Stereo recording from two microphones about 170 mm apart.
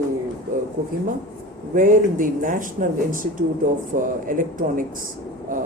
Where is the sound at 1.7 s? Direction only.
50° right (ahead or behind).